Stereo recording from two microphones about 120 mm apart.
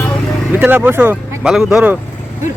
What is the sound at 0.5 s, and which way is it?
Speech, 15° right (ahead or behind).